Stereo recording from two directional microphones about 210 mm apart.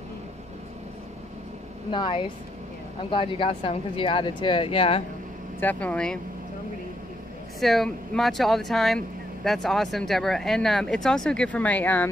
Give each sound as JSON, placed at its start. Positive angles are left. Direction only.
{"t": 1.9, "sound": "speech", "side_deg": 25}
{"t": 5.6, "sound": "speech", "side_deg": 10}
{"t": 7.6, "sound": "speech", "side_deg": 0}